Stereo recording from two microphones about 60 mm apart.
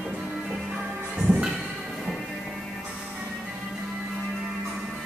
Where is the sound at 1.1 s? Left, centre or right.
Centre.